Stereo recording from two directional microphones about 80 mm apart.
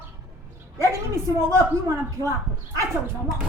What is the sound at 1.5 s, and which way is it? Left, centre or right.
Speech, right.